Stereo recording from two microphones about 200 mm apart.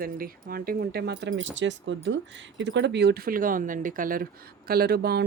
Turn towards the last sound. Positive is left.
turn(degrees=-50)  # may be behind; listen again after turning